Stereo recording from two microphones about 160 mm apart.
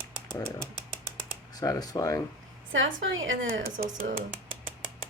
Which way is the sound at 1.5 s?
20° left (ahead or behind).